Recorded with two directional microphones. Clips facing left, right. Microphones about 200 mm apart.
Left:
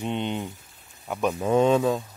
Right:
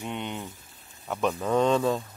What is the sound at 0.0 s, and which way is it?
Speech, 20° left (ahead or behind).